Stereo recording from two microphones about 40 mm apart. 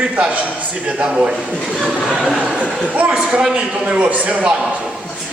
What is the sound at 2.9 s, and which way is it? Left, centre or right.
Speech, right.